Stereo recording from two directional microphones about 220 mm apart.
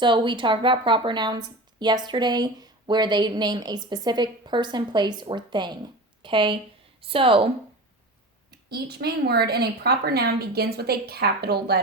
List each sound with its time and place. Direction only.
0.0 s speech: 20° right (ahead or behind)
8.4 s a woman's voice: 45° right (ahead or behind)